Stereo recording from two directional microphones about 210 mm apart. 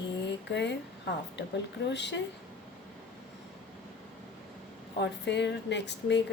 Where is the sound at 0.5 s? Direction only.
55° left (ahead or behind).